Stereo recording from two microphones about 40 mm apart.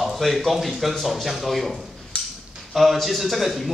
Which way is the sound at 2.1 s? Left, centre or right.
Left.